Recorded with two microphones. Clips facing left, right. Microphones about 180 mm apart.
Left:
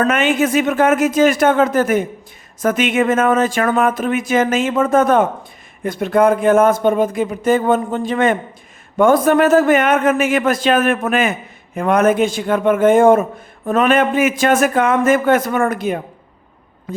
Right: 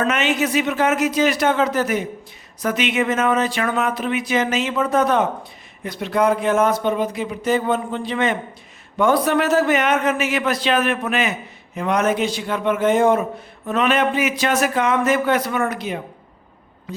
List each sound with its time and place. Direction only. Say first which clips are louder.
0.0 s speech: left 5 dB; 50° left (ahead or behind)